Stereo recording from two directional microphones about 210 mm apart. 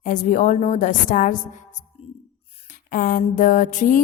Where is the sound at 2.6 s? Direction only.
40° left (ahead or behind).